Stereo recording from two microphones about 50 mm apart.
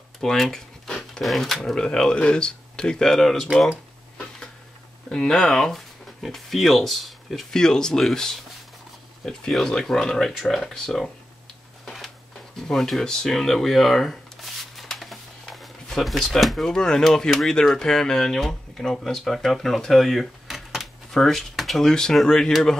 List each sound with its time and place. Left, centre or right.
0.2 s a sound: centre
1.2 s speech: centre
5.1 s speech: centre
5.5 s speech: centre
7.5 s speech: centre
12.5 s a sound: centre
16.3 s speech: centre
16.6 s speech: centre